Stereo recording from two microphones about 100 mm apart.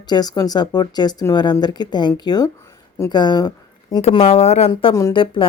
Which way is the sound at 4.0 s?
90° left.